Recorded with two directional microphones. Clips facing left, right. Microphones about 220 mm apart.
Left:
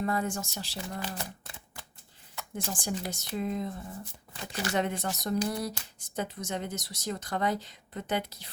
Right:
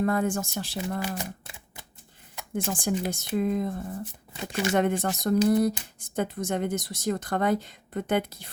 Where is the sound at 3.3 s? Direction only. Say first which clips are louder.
Right 6 dB; 55° right (ahead or behind).